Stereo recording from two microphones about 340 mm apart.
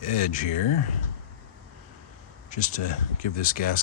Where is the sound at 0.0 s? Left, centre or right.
Left.